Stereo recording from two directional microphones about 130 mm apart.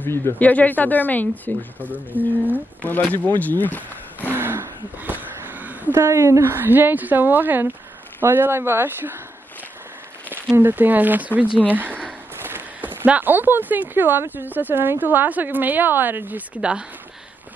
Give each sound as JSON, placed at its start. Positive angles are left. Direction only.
{"t": 0.0, "sound": "speech", "side_deg": 15}
{"t": 1.8, "sound": "speech", "side_deg": -15}
{"t": 3.1, "sound": "speech", "side_deg": 15}
{"t": 4.4, "sound": "speech", "side_deg": -15}
{"t": 10.3, "sound": "speech", "side_deg": -15}